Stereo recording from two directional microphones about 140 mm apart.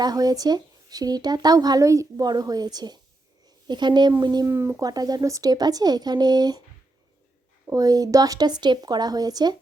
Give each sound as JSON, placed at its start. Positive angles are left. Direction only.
{"t": 0.0, "sound": "speech", "side_deg": -30}
{"t": 7.7, "sound": "speech", "side_deg": -25}